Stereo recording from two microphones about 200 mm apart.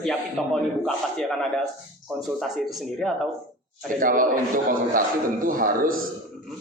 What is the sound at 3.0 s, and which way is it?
Speech, centre (ahead or behind).